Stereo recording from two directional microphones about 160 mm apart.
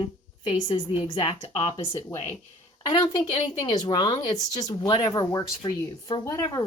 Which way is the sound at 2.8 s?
25° left (ahead or behind).